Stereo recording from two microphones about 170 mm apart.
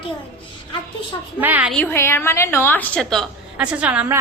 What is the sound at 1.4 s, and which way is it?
Speech, 10° right (ahead or behind).